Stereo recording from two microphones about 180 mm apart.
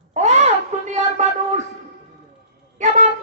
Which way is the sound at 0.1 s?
40° right (ahead or behind).